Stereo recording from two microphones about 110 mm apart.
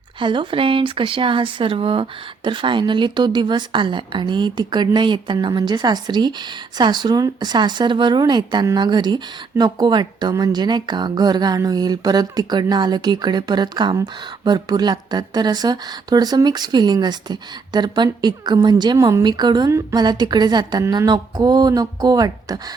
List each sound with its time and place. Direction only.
0.2 s speech: 45° right (ahead or behind)
18.9 s speech: 30° right (ahead or behind)
19.2 s speech: 40° right (ahead or behind)